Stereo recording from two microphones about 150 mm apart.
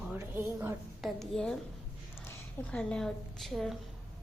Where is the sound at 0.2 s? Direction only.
15° right (ahead or behind).